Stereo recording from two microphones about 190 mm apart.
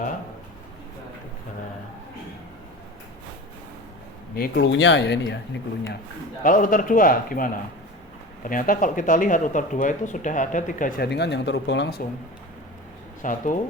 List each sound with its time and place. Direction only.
4.4 s speech: 50° left (ahead or behind)
6.4 s speech: 45° left (ahead or behind); by 12.0 s 60° left (ahead or behind)
13.2 s speech: 45° left (ahead or behind)